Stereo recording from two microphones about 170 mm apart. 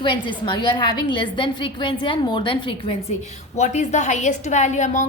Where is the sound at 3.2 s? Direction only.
45° left (ahead or behind).